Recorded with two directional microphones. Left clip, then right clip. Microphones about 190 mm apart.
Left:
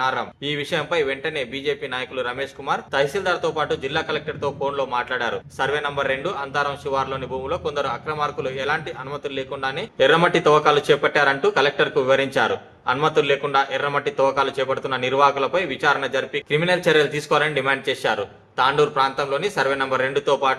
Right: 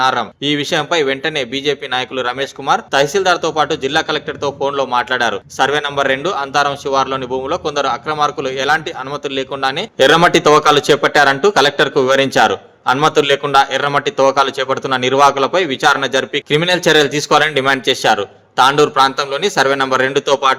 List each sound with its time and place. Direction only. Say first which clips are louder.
0.0 s a man's voice: right 8 dB; 50° right (ahead or behind)